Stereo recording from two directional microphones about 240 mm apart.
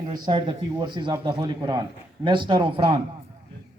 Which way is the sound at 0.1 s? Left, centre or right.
Right.